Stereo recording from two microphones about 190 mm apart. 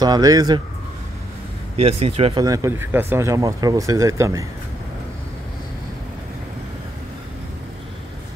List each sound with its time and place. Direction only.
0.0 s speech: 20° right (ahead or behind)
1.8 s speech: 30° right (ahead or behind)
2.4 s speech: 15° right (ahead or behind)